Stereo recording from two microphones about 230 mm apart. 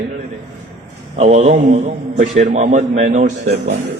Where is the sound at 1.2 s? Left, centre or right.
Right.